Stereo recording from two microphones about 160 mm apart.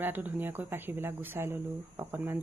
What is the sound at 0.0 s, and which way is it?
Speech, 10° right (ahead or behind).